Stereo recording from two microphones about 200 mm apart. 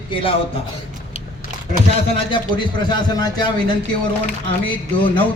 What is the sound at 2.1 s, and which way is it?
Speech, 25° left (ahead or behind).